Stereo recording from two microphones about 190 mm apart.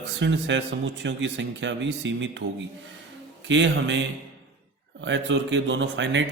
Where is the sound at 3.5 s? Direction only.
70° right (ahead or behind).